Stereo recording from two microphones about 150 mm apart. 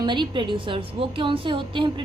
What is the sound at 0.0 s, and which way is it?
A woman's voice, 30° right (ahead or behind).